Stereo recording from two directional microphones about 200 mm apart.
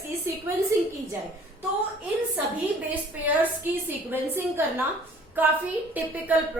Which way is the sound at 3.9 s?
10° right (ahead or behind).